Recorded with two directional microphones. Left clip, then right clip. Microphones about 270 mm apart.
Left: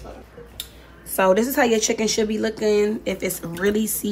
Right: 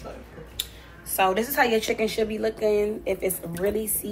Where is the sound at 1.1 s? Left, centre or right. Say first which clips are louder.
Left 5 dB; left.